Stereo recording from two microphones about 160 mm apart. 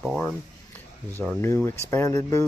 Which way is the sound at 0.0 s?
Centre (ahead or behind).